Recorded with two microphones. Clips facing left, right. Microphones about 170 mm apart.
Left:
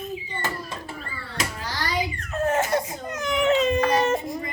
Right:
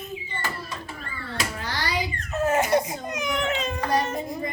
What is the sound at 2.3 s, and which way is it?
Baby cry, 10° right (ahead or behind).